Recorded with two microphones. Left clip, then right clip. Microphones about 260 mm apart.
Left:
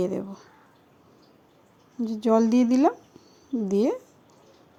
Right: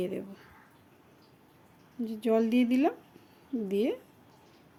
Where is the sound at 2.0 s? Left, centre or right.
Left.